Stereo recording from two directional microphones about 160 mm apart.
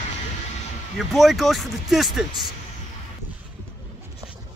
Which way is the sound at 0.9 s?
Centre (ahead or behind).